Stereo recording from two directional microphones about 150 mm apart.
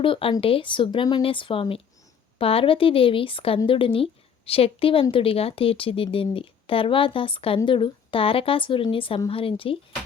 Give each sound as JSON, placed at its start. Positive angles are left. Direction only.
{"t": 0.0, "sound": "a woman's voice", "side_deg": 35}